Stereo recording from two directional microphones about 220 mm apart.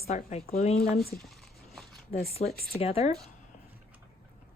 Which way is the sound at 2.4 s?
35° left (ahead or behind).